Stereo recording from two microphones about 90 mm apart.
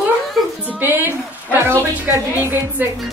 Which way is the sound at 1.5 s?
25° right (ahead or behind).